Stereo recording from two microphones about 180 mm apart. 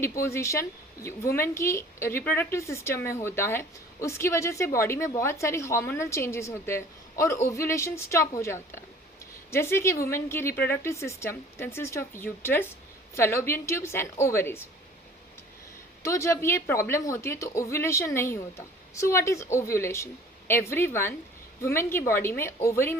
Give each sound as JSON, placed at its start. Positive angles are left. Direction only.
{"t": 0.0, "sound": "a woman's voice", "side_deg": 15}
{"t": 16.0, "sound": "a woman's voice", "side_deg": 15}